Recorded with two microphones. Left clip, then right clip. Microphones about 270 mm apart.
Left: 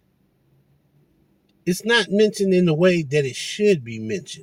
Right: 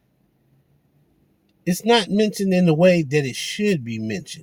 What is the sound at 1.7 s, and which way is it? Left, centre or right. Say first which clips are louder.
Speech: right 1 dB; centre.